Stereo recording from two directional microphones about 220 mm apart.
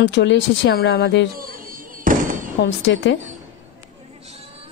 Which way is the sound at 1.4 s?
40° right (ahead or behind).